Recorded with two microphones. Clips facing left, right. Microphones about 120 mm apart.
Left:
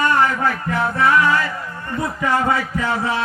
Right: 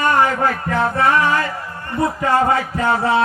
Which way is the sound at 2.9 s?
30° right (ahead or behind).